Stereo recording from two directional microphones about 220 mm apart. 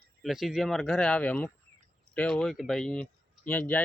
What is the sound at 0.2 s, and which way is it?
Speech, centre (ahead or behind).